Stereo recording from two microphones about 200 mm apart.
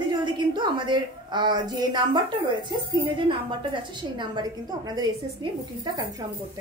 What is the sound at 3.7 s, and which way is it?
Speech, 25° right (ahead or behind).